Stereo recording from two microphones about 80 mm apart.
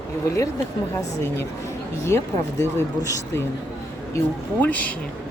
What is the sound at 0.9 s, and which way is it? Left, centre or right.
Speech, left.